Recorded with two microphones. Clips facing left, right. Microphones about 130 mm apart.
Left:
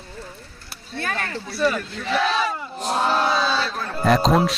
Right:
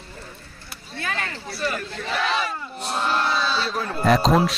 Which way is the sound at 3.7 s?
Centre (ahead or behind).